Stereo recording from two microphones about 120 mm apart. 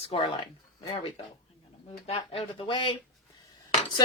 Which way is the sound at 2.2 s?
50° left (ahead or behind).